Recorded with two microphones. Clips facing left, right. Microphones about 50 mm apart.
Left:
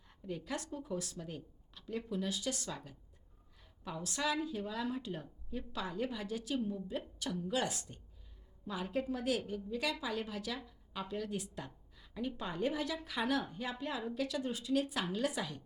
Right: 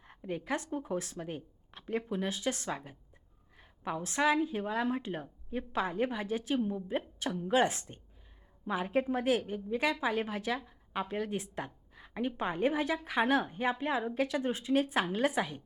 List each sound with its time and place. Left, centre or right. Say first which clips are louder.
0.0 s a woman's voice: right 5 dB; right